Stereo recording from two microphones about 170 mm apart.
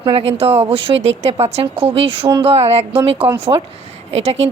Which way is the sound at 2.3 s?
35° right (ahead or behind).